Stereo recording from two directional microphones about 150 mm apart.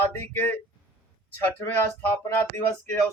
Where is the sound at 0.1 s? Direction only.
15° left (ahead or behind).